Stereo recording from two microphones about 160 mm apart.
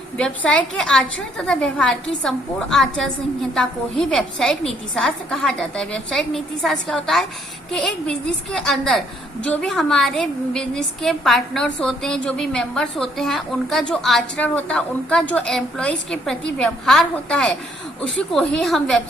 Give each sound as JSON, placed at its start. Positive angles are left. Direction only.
{"t": 0.2, "sound": "a woman's voice", "side_deg": 5}